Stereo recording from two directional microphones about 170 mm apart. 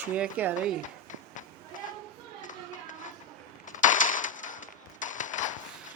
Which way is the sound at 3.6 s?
50° left (ahead or behind).